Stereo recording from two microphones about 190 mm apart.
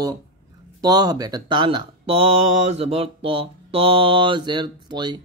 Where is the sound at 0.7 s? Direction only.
20° right (ahead or behind).